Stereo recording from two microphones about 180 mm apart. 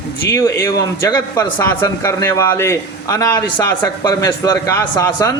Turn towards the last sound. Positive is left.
turn(degrees=20)  # may be behind; listen again after turning